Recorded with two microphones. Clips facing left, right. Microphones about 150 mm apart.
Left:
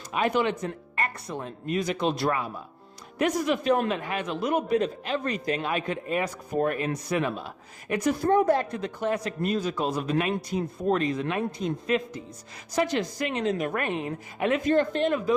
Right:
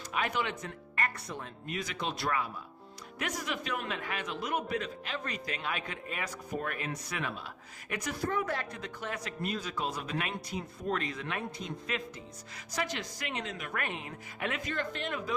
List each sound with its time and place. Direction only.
0.1 s a man's voice: 30° left (ahead or behind)
9.2 s a man's voice: 40° left (ahead or behind)